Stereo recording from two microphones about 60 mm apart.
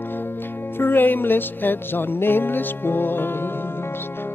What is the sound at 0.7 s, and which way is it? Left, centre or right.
Music, left.